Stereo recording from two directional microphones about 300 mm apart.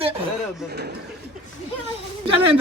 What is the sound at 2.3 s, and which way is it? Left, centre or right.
Speech, right.